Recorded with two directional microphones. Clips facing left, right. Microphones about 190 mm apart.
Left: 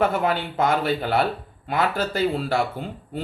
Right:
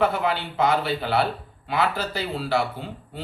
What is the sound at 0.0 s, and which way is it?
Speech, 45° left (ahead or behind).